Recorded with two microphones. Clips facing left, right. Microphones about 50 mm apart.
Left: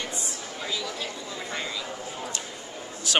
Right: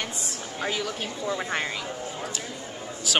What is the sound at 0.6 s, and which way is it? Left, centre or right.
Speech, right.